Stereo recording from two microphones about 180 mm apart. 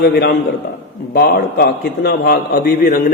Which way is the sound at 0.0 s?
65° left (ahead or behind).